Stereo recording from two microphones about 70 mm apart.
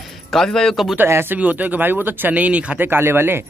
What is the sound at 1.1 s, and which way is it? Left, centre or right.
Speech, right.